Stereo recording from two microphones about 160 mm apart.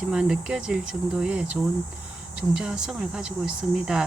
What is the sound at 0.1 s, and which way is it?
Speech, 5° right (ahead or behind).